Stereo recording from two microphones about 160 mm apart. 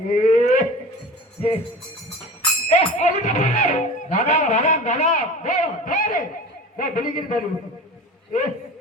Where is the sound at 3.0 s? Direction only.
50° left (ahead or behind).